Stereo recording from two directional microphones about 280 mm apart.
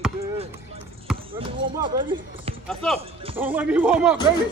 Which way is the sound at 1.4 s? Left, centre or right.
Centre.